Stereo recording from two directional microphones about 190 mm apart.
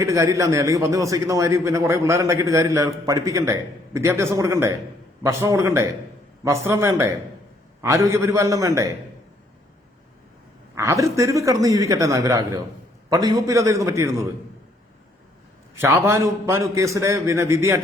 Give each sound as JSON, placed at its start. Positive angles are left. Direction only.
{"t": 0.0, "sound": "a man's voice", "side_deg": -15}
{"t": 10.8, "sound": "a man's voice", "side_deg": -15}
{"t": 15.8, "sound": "a man's voice", "side_deg": -15}